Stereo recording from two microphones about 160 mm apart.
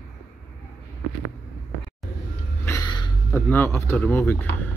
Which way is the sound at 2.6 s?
20° left (ahead or behind).